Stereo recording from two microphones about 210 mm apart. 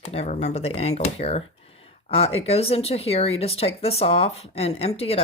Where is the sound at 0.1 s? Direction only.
30° left (ahead or behind).